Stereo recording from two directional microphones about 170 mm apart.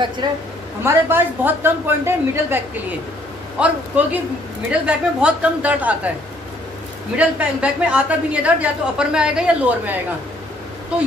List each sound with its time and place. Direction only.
0.2 s a woman's voice: 25° right (ahead or behind)
0.8 s a woman's voice: 15° right (ahead or behind)
7.2 s a woman's voice: 5° right (ahead or behind)